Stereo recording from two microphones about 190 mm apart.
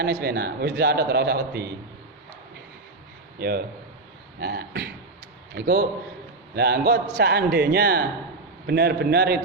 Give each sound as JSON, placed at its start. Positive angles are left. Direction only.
{"t": 0.0, "sound": "a man's voice", "side_deg": -60}
{"t": 3.4, "sound": "a man's voice", "side_deg": -50}